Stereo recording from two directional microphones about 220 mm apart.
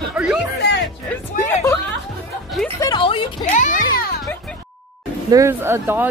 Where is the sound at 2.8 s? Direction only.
20° left (ahead or behind).